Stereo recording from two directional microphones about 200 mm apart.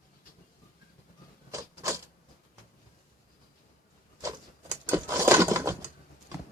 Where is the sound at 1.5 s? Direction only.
15° right (ahead or behind).